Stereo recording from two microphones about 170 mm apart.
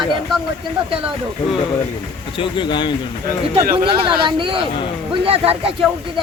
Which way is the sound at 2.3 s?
30° left (ahead or behind).